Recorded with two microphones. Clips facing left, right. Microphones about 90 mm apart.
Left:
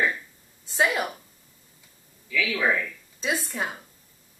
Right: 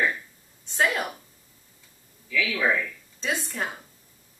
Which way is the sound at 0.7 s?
5° left (ahead or behind).